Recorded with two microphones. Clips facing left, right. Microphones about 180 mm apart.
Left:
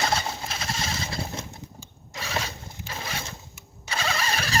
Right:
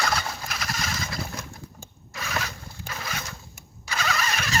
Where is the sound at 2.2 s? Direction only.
30° left (ahead or behind).